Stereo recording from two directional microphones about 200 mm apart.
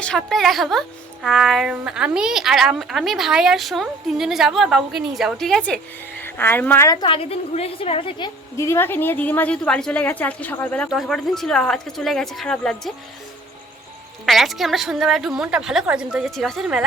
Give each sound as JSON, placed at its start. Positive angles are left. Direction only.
{"t": 0.0, "sound": "a woman's voice", "side_deg": 0}
{"t": 8.5, "sound": "a woman's voice", "side_deg": 15}
{"t": 14.3, "sound": "a woman's voice", "side_deg": 0}